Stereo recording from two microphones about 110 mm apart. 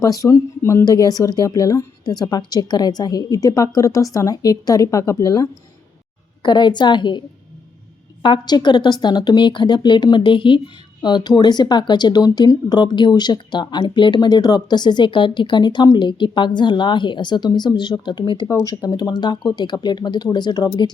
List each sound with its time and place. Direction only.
0.0 s a woman's voice: 30° left (ahead or behind)
6.4 s speech: 40° left (ahead or behind)
8.2 s a woman's voice: 45° left (ahead or behind)